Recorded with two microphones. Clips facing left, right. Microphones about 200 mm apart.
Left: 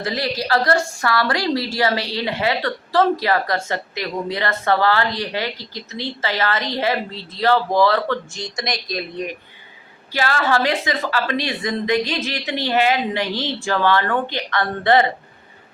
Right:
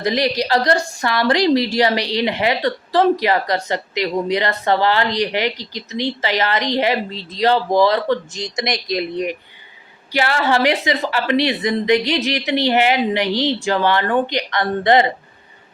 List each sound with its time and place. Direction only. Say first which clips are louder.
0.0 s a woman's voice: right 5 dB; 20° right (ahead or behind)